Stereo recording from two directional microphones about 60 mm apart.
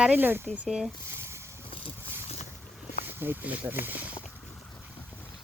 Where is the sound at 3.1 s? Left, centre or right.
Right.